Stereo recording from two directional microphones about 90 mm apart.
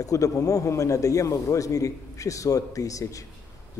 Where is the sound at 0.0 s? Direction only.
40° left (ahead or behind).